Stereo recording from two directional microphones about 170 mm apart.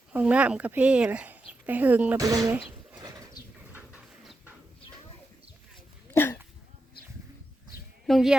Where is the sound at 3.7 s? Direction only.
5° right (ahead or behind).